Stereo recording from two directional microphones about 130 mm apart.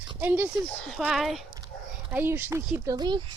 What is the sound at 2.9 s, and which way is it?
Speech, 35° right (ahead or behind).